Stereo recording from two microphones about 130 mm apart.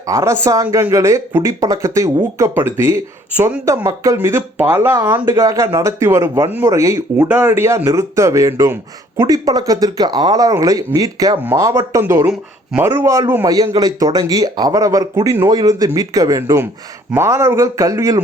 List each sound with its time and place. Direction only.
0.0 s speech: 25° right (ahead or behind)
7.3 s speech: 15° right (ahead or behind)